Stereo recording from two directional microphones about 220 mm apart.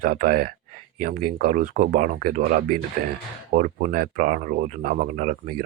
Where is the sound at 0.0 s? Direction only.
40° right (ahead or behind).